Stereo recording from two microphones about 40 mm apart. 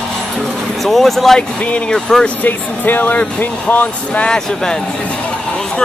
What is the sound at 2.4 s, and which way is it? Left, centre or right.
Speech, left.